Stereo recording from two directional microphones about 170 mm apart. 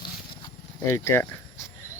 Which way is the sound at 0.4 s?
20° left (ahead or behind).